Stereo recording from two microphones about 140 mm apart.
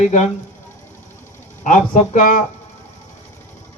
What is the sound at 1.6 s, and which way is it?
Speech, 65° left (ahead or behind).